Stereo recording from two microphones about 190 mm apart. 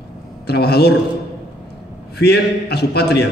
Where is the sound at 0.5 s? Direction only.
55° left (ahead or behind).